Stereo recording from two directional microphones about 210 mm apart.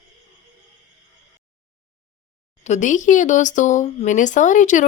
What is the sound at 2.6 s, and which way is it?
A woman's voice, 35° left (ahead or behind).